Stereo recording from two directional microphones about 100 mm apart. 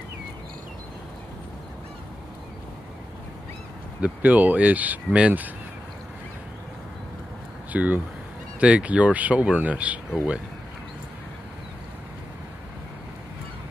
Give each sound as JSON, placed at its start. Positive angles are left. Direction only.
{"t": 4.0, "sound": "speech", "side_deg": -15}
{"t": 7.7, "sound": "speech", "side_deg": -15}